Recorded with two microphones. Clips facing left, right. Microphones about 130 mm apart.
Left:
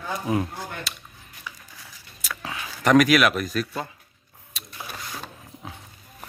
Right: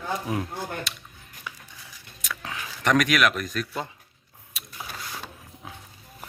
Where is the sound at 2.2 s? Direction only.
5° left (ahead or behind).